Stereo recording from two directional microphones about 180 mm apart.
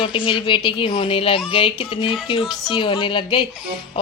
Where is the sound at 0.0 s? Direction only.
30° left (ahead or behind).